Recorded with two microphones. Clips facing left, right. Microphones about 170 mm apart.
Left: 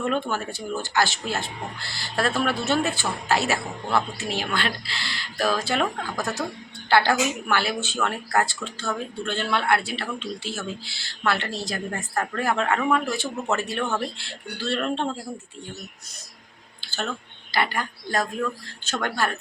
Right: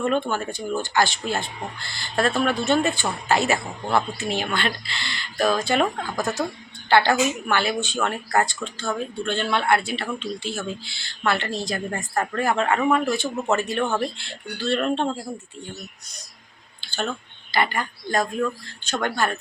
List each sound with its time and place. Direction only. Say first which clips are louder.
0.0 s speech: right 3 dB; 5° left (ahead or behind)
16.8 s a sound: right 3 dB; 5° left (ahead or behind)
17.5 s speech: right 2 dB; centre (ahead or behind)